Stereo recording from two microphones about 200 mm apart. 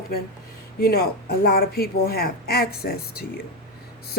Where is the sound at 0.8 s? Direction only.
50° left (ahead or behind).